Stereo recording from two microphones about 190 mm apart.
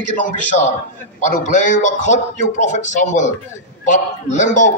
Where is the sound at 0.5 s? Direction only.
45° left (ahead or behind).